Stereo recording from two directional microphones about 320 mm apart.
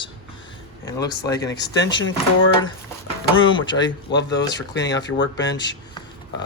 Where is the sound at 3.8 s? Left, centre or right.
Left.